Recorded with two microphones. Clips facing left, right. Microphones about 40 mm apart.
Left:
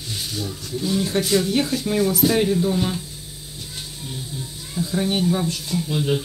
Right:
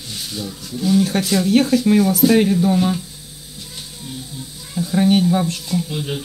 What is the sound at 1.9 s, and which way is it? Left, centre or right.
Speech, right.